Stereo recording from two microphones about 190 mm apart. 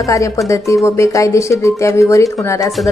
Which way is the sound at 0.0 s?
15° left (ahead or behind).